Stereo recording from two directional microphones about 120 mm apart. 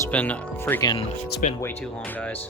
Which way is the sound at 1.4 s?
90° left.